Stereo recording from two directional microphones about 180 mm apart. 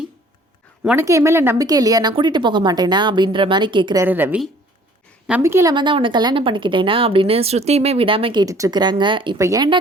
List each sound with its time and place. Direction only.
0.9 s speech: 15° right (ahead or behind)
4.0 s a woman's voice: 10° right (ahead or behind)
5.7 s speech: 25° right (ahead or behind)